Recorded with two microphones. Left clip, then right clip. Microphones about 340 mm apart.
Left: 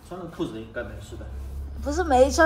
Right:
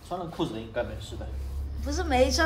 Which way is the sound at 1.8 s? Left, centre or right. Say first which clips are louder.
Left 5 dB; centre.